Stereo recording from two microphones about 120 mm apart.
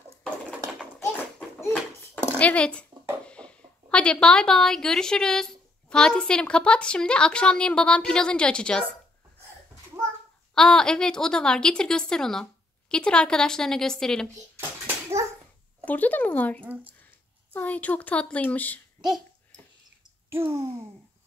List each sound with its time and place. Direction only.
0.2 s a sound: centre (ahead or behind)
2.3 s speech: 10° left (ahead or behind)
10.5 s a woman's voice: 5° left (ahead or behind)
15.8 s speech: 15° left (ahead or behind)
18.9 s a child's voice: 5° right (ahead or behind)
20.2 s a sound: 20° right (ahead or behind)